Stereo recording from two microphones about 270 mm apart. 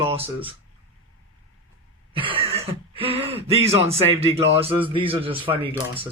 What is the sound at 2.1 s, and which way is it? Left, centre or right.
Speech, centre.